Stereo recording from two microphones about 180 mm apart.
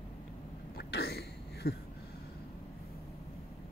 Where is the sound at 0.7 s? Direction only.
65° left (ahead or behind).